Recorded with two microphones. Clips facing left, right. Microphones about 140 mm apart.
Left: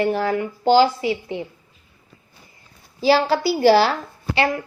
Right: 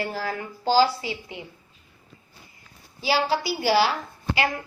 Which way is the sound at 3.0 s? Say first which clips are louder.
Left 7 dB; 45° left (ahead or behind).